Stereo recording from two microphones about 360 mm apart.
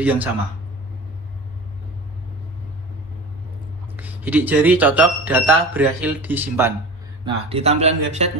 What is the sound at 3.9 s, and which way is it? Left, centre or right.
Speech, centre.